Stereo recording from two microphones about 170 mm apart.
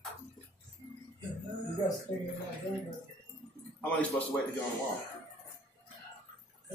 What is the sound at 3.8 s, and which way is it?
Speech, 10° left (ahead or behind).